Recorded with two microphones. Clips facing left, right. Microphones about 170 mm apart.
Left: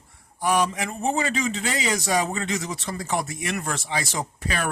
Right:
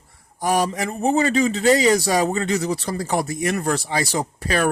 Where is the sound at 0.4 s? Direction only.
40° right (ahead or behind).